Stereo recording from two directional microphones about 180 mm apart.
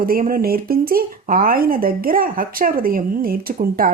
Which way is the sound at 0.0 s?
55° right (ahead or behind).